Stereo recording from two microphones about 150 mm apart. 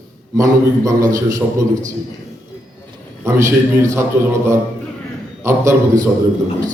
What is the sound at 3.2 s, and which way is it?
A man's voice, 20° right (ahead or behind).